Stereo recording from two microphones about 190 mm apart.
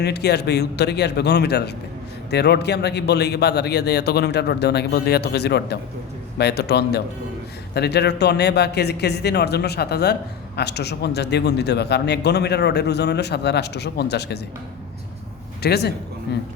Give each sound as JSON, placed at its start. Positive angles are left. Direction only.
{"t": 0.0, "sound": "a man's voice", "side_deg": 60}
{"t": 15.6, "sound": "a man's voice", "side_deg": 60}